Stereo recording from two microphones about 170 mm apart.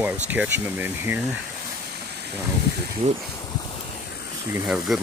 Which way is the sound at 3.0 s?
40° right (ahead or behind).